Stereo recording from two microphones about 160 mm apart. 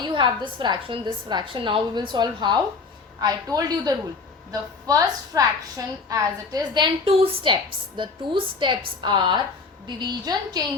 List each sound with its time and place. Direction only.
0.0 s a woman's voice: 30° right (ahead or behind)